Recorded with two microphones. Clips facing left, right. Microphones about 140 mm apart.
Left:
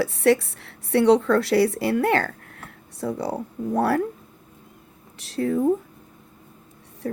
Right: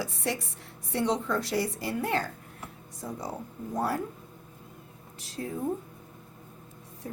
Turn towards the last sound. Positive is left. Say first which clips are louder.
# left 10 dB
turn(degrees=75)  # may be behind; listen again after turning